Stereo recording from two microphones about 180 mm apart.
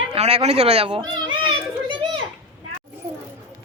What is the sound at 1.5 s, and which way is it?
Children playing, 30° right (ahead or behind).